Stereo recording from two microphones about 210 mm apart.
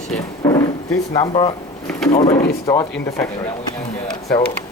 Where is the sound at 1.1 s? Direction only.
20° left (ahead or behind).